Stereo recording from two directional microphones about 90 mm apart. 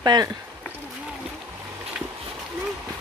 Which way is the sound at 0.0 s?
50° right (ahead or behind).